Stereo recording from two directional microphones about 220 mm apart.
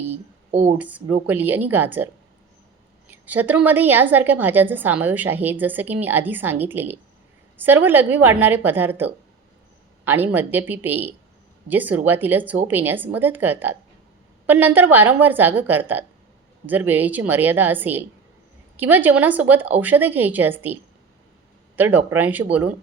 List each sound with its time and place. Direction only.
0.5 s speech: 30° right (ahead or behind)
0.8 s a woman's voice: 5° right (ahead or behind)
3.1 s a woman's voice: 5° right (ahead or behind)
21.8 s a woman's voice: 10° right (ahead or behind)